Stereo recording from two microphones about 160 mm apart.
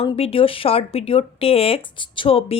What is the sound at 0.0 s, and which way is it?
Speech, 35° left (ahead or behind).